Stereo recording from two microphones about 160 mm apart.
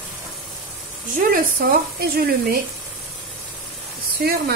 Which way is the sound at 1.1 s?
60° right (ahead or behind).